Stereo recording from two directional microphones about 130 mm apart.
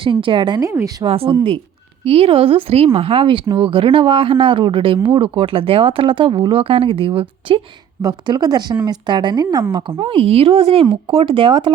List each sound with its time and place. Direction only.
0.0 s speech: 40° right (ahead or behind)
0.6 s a woman's voice: 20° right (ahead or behind)
1.0 s speech: 45° right (ahead or behind)
8.0 s speech: 30° right (ahead or behind)